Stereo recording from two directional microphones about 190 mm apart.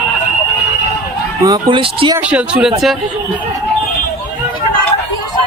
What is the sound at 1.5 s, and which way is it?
Speech, 25° right (ahead or behind).